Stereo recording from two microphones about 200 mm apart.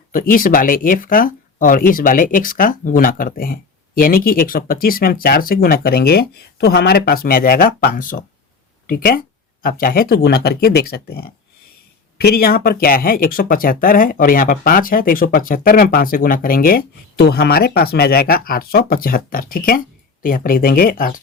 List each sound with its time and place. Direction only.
0.1 s speech: 45° left (ahead or behind)